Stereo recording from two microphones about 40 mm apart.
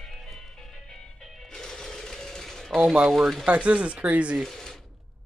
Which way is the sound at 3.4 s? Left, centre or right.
Right.